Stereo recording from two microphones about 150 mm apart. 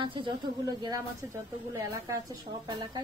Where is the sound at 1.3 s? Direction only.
15° right (ahead or behind).